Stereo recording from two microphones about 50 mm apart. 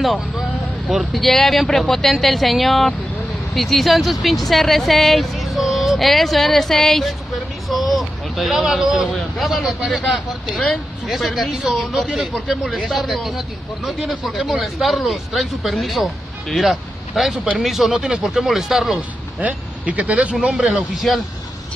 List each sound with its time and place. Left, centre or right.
0.0 s speech: centre
12.1 s speech: centre
12.8 s speech: centre
17.9 s speech: centre
18.9 s a man's voice: right
20.7 s speech: centre